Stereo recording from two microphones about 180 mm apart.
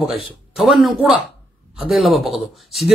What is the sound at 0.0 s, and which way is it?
Speech, centre (ahead or behind).